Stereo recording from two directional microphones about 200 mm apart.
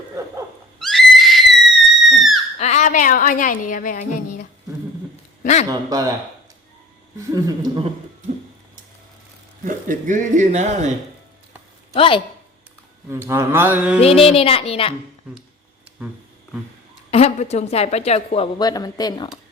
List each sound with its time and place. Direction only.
0.8 s a sound: centre (ahead or behind)
2.0 s screaming: centre (ahead or behind)
2.6 s speech: 35° left (ahead or behind)
5.4 s a sound: 35° left (ahead or behind)
5.6 s mantra: 15° right (ahead or behind)
7.3 s a woman's voice: 20° right (ahead or behind)
9.6 s speech: 40° right (ahead or behind)
11.9 s a child's voice: 25° left (ahead or behind)
13.1 s mantra: 10° right (ahead or behind)
14.0 s a child's voice: 30° left (ahead or behind)
17.1 s a woman's voice: 30° left (ahead or behind)
18.6 s a child's voice: 20° left (ahead or behind)